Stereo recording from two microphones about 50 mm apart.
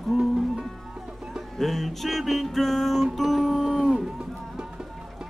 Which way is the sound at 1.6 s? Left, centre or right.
Centre.